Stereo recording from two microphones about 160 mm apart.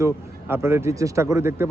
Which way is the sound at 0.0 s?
15° right (ahead or behind).